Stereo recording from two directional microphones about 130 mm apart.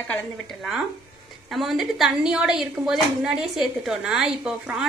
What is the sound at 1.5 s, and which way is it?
Speech, centre (ahead or behind).